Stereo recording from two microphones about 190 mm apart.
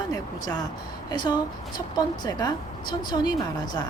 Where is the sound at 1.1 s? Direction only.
20° left (ahead or behind).